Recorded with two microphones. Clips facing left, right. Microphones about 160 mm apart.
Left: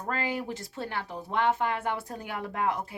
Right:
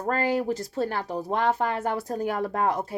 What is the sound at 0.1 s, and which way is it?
Speech, 40° right (ahead or behind).